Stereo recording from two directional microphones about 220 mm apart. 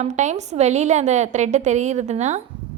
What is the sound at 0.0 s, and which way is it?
A woman's voice, 30° right (ahead or behind).